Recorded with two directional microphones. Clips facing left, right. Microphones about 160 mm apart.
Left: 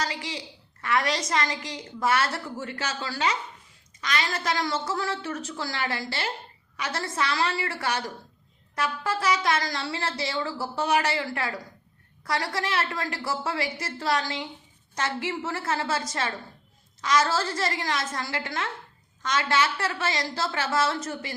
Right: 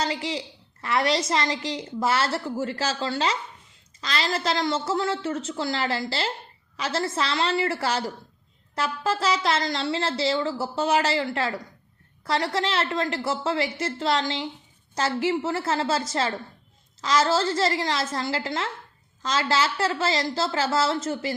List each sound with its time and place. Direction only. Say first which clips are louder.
0.0 s a woman's voice: right 4 dB; 30° right (ahead or behind)